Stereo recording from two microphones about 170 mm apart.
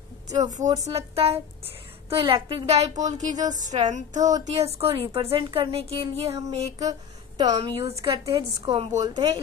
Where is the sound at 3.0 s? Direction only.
45° right (ahead or behind).